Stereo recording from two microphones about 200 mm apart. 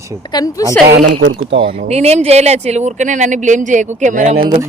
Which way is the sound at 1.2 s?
70° right (ahead or behind).